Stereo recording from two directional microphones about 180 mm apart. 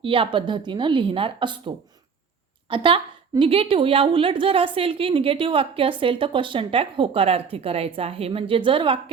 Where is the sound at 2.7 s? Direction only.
30° right (ahead or behind).